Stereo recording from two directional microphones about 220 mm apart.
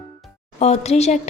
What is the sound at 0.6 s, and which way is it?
Speech, 30° left (ahead or behind).